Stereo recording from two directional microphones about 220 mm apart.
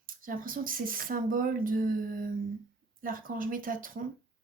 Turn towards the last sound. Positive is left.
turn(degrees=-40)  # may be behind; listen again after turning